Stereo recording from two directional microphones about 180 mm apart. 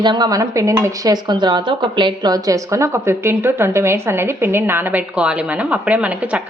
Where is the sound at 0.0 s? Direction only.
25° right (ahead or behind).